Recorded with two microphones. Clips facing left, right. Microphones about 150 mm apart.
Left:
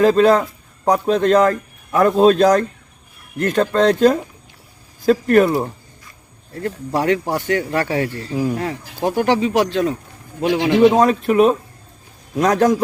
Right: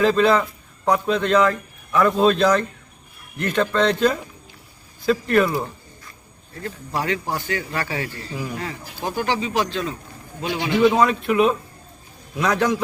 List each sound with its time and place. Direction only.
0.0 s a man's voice: 45° left (ahead or behind)
7.0 s a man's voice: 65° left (ahead or behind)
9.0 s speech: 60° left (ahead or behind)
10.4 s a man's voice: 90° left
10.8 s a man's voice: 40° left (ahead or behind)